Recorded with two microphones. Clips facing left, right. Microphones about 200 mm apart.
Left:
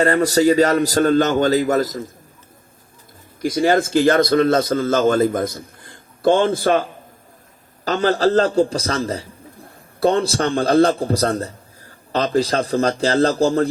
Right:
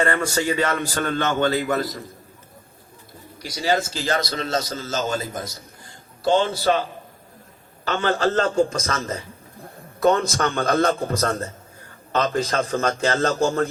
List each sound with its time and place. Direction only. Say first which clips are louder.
0.0 s a man's voice: left 7 dB; 35° left (ahead or behind)
3.4 s a man's voice: left 7 dB; 50° left (ahead or behind)
7.9 s a man's voice: left 5 dB; 40° left (ahead or behind)